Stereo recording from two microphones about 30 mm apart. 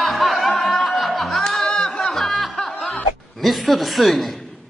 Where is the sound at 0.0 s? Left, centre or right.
Centre.